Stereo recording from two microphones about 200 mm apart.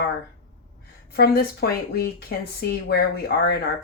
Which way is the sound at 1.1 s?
55° left (ahead or behind).